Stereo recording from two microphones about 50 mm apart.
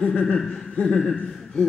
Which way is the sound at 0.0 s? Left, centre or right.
Left.